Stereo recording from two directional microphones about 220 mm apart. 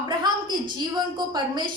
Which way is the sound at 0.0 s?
20° right (ahead or behind).